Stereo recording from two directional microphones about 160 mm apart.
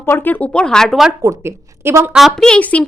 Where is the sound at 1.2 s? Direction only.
15° right (ahead or behind).